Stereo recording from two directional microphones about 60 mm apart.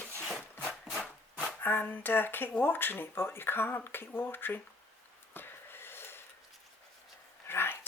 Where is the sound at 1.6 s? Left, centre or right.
Left.